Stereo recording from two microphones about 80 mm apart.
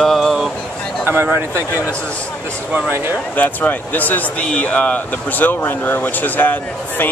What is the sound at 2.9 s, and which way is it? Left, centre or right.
Speech, right.